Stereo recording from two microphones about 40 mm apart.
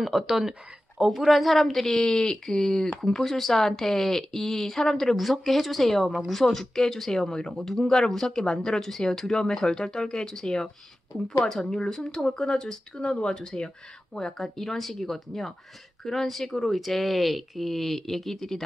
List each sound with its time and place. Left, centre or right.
0.0 s speech: centre
1.1 s speech: centre